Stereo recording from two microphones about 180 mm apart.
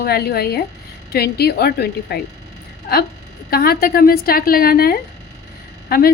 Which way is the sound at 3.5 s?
55° left (ahead or behind).